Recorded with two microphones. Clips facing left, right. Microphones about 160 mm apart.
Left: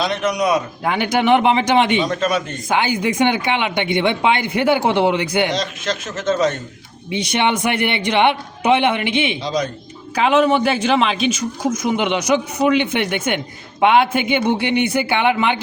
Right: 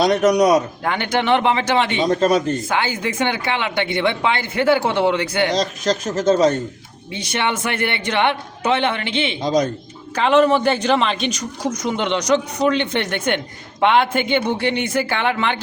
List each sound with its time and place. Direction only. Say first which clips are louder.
0.0 s speech: right 5 dB; 40° right (ahead or behind)
0.9 s speech: left 4 dB; 10° left (ahead or behind)
2.0 s speech: right 3 dB; 35° right (ahead or behind)
2.6 s speech: left 3 dB; 15° left (ahead or behind)
5.5 s speech: right 3 dB; 40° right (ahead or behind)
7.1 s speech: left 4 dB; 20° left (ahead or behind)
9.4 s speech: right 3 dB; 45° right (ahead or behind)
10.2 s speech: even; 5° left (ahead or behind)